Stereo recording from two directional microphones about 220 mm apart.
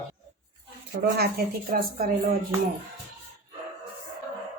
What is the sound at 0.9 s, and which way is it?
Speech, 45° right (ahead or behind).